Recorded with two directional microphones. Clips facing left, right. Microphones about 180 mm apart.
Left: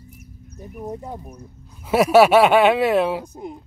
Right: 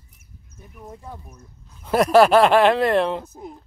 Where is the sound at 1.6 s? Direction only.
5° left (ahead or behind).